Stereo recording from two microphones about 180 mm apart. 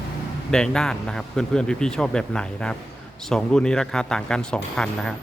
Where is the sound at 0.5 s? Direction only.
5° left (ahead or behind).